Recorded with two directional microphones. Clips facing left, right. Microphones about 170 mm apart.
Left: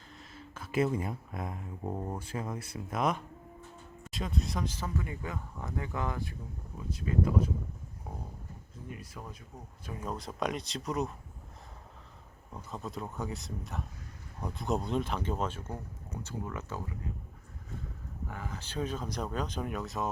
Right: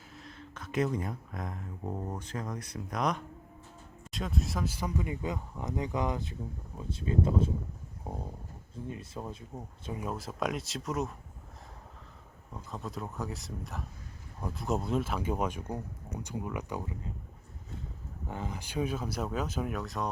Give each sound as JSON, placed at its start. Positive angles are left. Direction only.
{"t": 0.1, "sound": "speech", "side_deg": 0}
{"t": 8.1, "sound": "a sound", "side_deg": -30}
{"t": 8.7, "sound": "speech", "side_deg": -25}
{"t": 10.0, "sound": "speech", "side_deg": -5}
{"t": 12.7, "sound": "speech", "side_deg": 0}
{"t": 18.3, "sound": "speech", "side_deg": -20}